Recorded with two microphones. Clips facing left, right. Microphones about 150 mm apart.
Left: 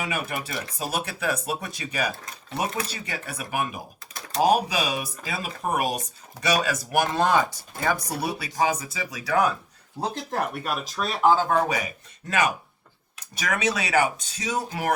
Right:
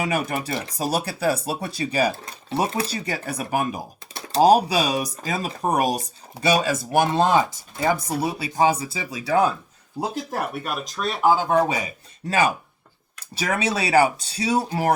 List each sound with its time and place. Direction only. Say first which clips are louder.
0.0 s speech: right 5 dB; 40° right (ahead or behind)
10.0 s speech: right 1 dB; 5° right (ahead or behind)
11.4 s speech: right 3 dB; 25° right (ahead or behind)
13.3 s speech: right 2 dB; 30° right (ahead or behind)